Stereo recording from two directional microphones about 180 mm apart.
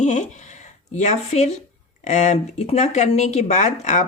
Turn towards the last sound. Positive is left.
turn(degrees=40)  # may be behind; listen again after turning